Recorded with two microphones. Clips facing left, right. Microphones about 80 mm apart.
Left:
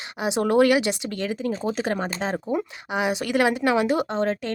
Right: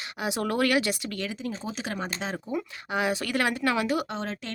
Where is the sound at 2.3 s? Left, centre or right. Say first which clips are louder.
Left 6 dB; left.